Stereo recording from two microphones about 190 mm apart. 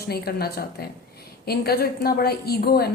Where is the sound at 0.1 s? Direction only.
55° left (ahead or behind).